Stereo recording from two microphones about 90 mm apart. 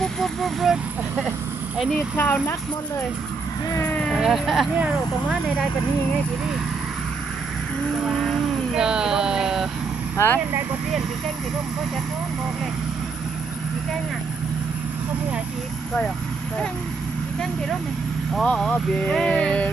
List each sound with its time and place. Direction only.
0.0 s speech: centre (ahead or behind)
2.1 s speech: 20° left (ahead or behind)
4.2 s speech: centre (ahead or behind)
8.0 s speech: centre (ahead or behind)
10.2 s speech: 25° left (ahead or behind)
18.4 s speech: 5° left (ahead or behind)
18.7 s a sound: 10° left (ahead or behind)